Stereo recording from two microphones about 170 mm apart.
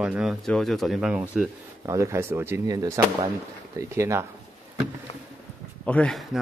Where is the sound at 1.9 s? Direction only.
15° right (ahead or behind).